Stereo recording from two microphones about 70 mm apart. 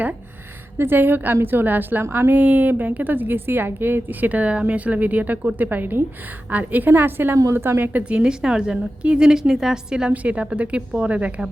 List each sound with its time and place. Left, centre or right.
0.8 s a woman's voice: right
8.0 s a woman's voice: centre